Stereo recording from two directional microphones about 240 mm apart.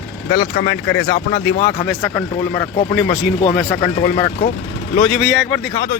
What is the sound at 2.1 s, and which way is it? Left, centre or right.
Speech, centre.